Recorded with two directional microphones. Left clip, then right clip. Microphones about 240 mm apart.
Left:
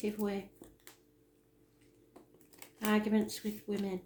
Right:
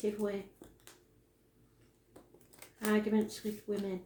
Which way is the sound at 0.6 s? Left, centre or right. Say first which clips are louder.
Even; centre.